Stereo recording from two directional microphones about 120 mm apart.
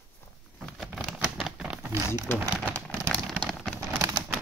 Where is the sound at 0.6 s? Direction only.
Centre (ahead or behind).